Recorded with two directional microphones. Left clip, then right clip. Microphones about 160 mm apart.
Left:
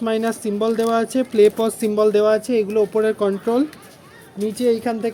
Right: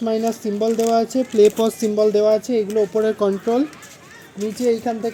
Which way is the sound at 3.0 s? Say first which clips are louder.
Even; 30° right (ahead or behind).